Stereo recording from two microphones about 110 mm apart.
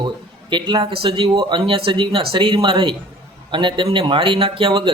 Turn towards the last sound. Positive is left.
turn(degrees=-50)  # may be behind; listen again after turning